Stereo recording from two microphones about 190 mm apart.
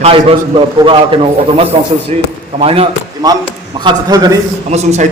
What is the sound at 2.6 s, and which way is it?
A man's voice, 30° right (ahead or behind).